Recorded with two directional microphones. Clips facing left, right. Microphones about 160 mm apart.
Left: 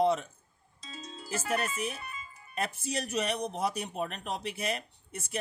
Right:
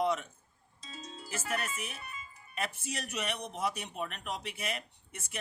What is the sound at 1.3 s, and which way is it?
Speech, 35° left (ahead or behind).